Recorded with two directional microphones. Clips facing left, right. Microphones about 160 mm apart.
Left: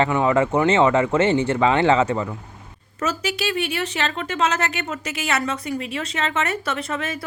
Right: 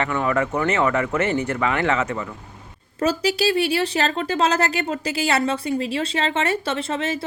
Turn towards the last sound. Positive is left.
turn(degrees=-30)  # may be behind; listen again after turning